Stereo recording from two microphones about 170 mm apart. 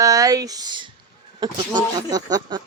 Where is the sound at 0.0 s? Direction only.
20° right (ahead or behind).